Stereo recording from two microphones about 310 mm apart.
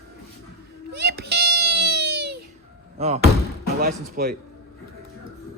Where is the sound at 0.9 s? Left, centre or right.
Right.